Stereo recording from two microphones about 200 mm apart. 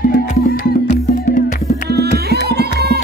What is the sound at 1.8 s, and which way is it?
Music, 55° right (ahead or behind).